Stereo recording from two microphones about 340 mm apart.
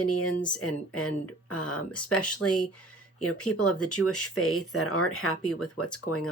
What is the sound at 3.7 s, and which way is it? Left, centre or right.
Speech, left.